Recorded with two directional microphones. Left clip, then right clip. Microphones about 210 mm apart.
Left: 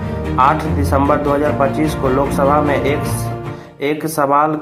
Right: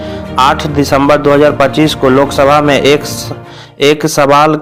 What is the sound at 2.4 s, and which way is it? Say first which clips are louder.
Speech: right 5 dB; 40° right (ahead or behind).